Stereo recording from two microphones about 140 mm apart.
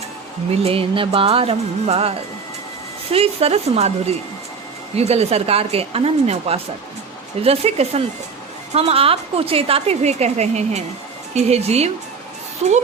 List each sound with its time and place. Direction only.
0.6 s a woman's voice: 40° right (ahead or behind)